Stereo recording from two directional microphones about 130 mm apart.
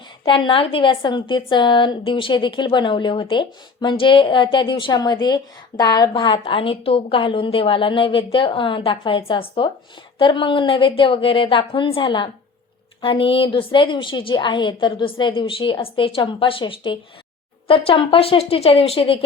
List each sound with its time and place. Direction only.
0.3 s a woman's voice: 40° left (ahead or behind)